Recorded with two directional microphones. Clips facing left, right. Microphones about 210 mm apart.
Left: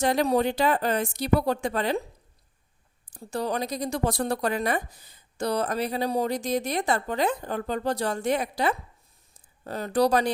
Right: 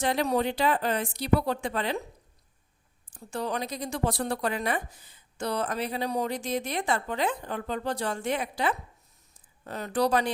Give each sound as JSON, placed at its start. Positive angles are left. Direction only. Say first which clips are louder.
{"t": 0.0, "sound": "speech", "louder": "left 3 dB", "side_deg": 40}
{"t": 3.1, "sound": "a woman's voice", "louder": "left 3 dB", "side_deg": 35}